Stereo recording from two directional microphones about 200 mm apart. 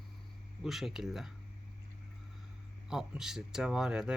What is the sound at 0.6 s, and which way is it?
Speech, centre (ahead or behind).